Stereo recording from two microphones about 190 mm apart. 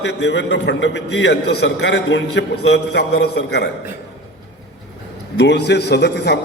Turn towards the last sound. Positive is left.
turn(degrees=65)  # may be behind; listen again after turning